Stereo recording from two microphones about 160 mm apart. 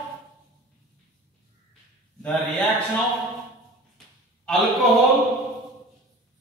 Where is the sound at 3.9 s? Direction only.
Centre (ahead or behind).